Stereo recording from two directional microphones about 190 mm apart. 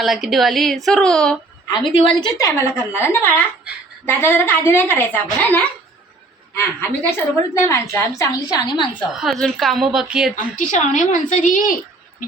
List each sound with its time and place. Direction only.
0.0 s a woman's voice: centre (ahead or behind)
1.7 s a woman's voice: 25° left (ahead or behind)
2.4 s a woman's voice: 15° left (ahead or behind)
9.1 s a woman's voice: centre (ahead or behind)
10.3 s a woman's voice: 45° left (ahead or behind)